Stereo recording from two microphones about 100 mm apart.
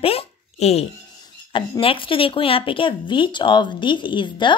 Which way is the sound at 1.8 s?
60° left (ahead or behind).